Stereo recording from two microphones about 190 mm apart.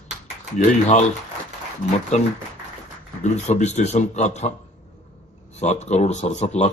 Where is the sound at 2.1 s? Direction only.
40° left (ahead or behind).